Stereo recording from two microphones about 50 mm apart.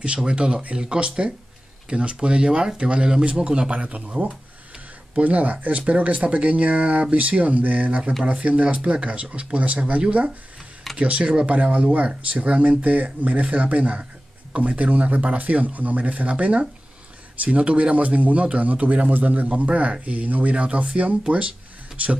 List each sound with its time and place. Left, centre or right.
0.0 s a man's voice: right
5.2 s a man's voice: right
8.2 s a man's voice: centre